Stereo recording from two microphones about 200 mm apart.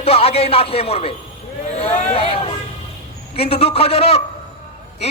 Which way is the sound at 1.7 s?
30° left (ahead or behind).